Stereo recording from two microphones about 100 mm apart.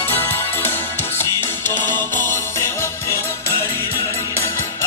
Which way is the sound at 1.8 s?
20° left (ahead or behind).